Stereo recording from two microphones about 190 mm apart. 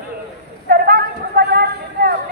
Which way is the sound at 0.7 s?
55° right (ahead or behind).